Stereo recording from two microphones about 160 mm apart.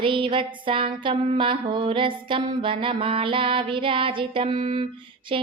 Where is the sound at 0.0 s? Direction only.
30° right (ahead or behind).